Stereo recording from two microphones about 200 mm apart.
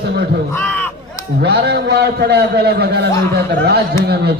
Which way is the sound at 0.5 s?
10° left (ahead or behind).